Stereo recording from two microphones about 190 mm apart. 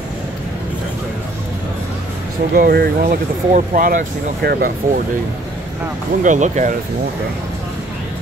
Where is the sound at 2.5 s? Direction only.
50° right (ahead or behind).